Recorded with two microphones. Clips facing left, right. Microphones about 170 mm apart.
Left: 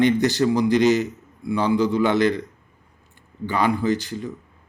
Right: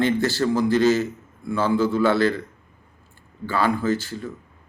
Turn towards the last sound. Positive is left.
turn(degrees=15)  # may be behind; listen again after turning